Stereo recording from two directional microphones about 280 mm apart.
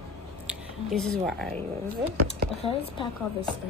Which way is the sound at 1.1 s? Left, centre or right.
Centre.